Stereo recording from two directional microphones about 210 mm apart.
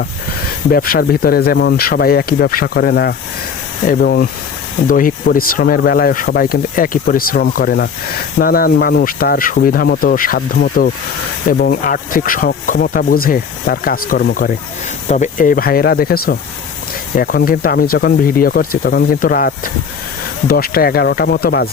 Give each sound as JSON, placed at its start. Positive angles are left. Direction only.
{"t": 0.7, "sound": "speech", "side_deg": 45}
{"t": 15.0, "sound": "speech", "side_deg": 35}